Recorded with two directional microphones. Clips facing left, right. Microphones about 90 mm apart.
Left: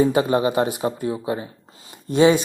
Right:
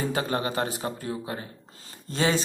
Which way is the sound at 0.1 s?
20° left (ahead or behind).